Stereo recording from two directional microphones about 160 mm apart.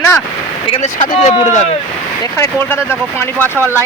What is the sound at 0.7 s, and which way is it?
Vehicle, 45° left (ahead or behind).